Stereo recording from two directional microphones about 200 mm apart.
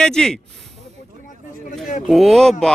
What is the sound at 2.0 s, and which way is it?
Speech, centre (ahead or behind).